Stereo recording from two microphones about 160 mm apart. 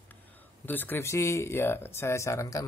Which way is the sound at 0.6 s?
10° left (ahead or behind).